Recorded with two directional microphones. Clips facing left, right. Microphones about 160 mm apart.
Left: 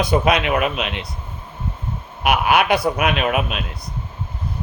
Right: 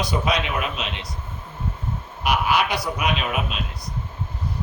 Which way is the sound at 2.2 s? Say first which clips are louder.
Left 5 dB; 60° left (ahead or behind).